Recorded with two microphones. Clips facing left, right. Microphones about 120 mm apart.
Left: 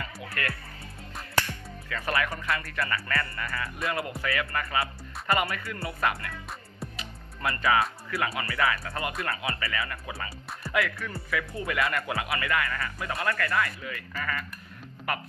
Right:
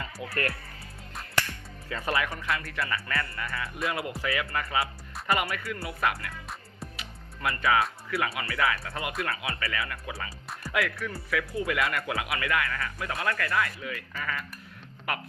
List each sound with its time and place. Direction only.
0.4 s speech: 35° right (ahead or behind)
1.9 s speech: 20° right (ahead or behind)
2.3 s speech: centre (ahead or behind)
3.9 s speech: 15° right (ahead or behind)